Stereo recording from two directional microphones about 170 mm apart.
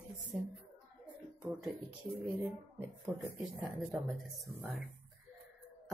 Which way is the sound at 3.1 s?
15° right (ahead or behind).